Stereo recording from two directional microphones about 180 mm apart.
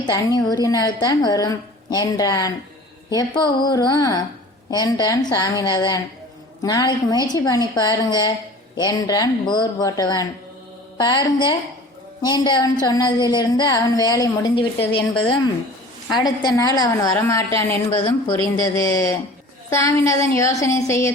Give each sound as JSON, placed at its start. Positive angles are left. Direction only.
{"t": 0.0, "sound": "a woman's voice", "side_deg": 25}
{"t": 16.1, "sound": "a woman's voice", "side_deg": 20}
{"t": 19.7, "sound": "a sound", "side_deg": 15}